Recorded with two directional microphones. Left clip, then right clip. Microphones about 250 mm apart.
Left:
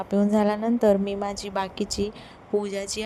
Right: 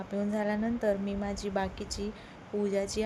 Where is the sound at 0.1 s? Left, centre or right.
Left.